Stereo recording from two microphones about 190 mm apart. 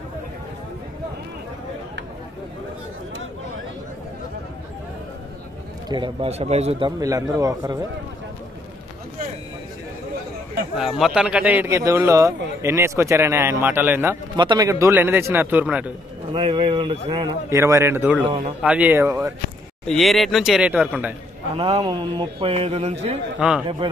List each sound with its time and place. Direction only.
5.9 s speech: 25° right (ahead or behind)
7.0 s a man's voice: 15° right (ahead or behind)
10.8 s a man's voice: centre (ahead or behind)
14.3 s a man's voice: 25° right (ahead or behind); by 15.9 s 5° right (ahead or behind)
16.3 s a man's voice: 30° right (ahead or behind); by 19.3 s 15° right (ahead or behind)
19.9 s speech: centre (ahead or behind)
21.5 s a man's voice: 30° right (ahead or behind)